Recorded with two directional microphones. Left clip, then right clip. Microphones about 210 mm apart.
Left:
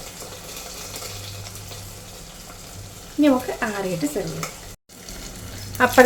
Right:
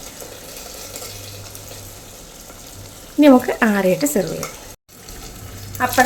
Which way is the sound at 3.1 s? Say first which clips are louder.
Right 7 dB; 50° right (ahead or behind).